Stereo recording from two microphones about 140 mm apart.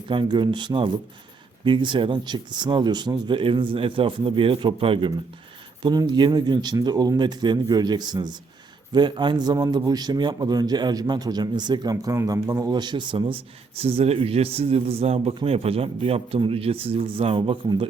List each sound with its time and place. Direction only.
0.1 s a man's voice: 35° right (ahead or behind)